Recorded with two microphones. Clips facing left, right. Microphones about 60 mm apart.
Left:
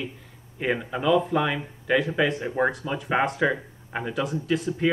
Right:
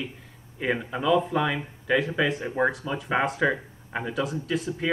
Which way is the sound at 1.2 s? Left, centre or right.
Centre.